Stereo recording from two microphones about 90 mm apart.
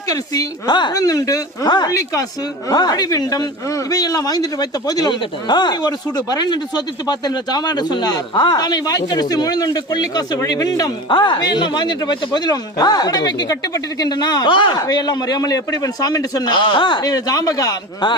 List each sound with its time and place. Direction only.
0.1 s speech: 50° left (ahead or behind)
1.0 s speech: 40° left (ahead or behind)
11.1 s speech: 60° left (ahead or behind)
14.8 s speech: 45° left (ahead or behind)